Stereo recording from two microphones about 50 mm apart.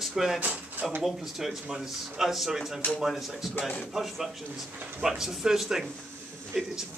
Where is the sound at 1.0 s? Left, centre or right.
Centre.